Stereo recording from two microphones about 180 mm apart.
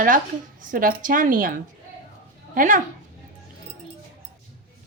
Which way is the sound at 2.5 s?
45° right (ahead or behind).